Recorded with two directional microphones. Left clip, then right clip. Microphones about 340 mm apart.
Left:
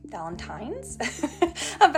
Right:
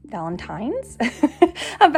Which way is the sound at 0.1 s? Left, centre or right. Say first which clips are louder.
Right 6 dB; right.